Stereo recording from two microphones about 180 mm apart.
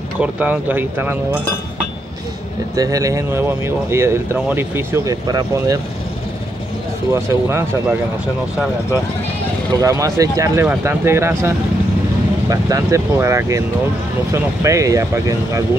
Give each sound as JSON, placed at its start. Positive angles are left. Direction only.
{"t": 0.2, "sound": "speech", "side_deg": -10}
{"t": 2.7, "sound": "speech", "side_deg": -20}
{"t": 7.1, "sound": "speech", "side_deg": -15}
{"t": 9.8, "sound": "speech", "side_deg": -20}